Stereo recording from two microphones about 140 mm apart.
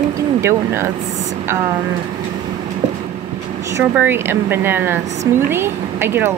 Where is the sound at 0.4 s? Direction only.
20° right (ahead or behind).